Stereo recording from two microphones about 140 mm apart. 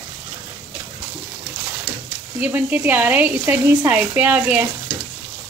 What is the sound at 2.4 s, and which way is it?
Speech, 10° right (ahead or behind).